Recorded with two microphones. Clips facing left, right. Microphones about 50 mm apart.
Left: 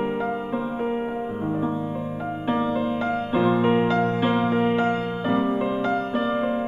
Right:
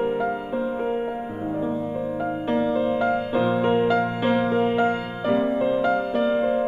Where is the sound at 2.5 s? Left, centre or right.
Centre.